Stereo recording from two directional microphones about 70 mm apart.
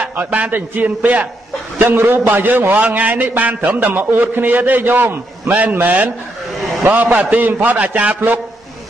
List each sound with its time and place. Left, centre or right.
0.0 s a man's voice: right